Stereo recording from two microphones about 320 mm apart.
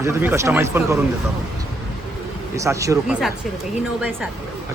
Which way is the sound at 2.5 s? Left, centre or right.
Centre.